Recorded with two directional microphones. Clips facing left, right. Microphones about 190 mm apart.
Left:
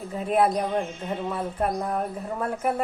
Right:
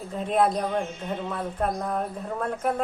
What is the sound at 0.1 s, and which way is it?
A woman's voice, 5° left (ahead or behind).